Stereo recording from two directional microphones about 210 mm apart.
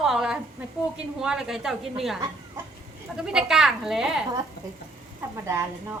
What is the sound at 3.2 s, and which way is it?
Speech, 5° right (ahead or behind).